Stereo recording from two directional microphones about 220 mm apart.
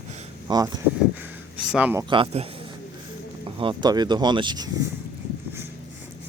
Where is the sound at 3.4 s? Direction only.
25° right (ahead or behind).